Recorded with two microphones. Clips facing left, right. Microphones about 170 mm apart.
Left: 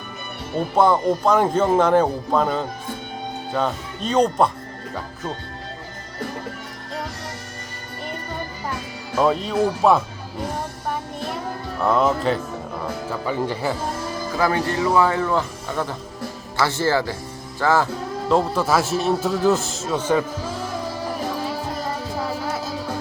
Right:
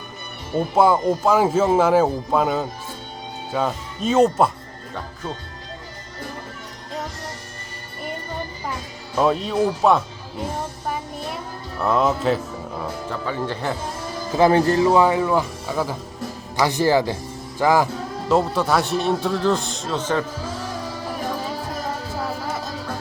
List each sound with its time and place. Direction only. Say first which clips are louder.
0.8 s a man's voice: even; 5° right (ahead or behind)
9.1 s a man's voice: even; centre (ahead or behind)
11.8 s a man's voice: left 1 dB; centre (ahead or behind)
14.3 s a man's voice: right 6 dB; 25° right (ahead or behind)
14.9 s speech: right 2 dB; 15° right (ahead or behind)
18.3 s a man's voice: even; centre (ahead or behind)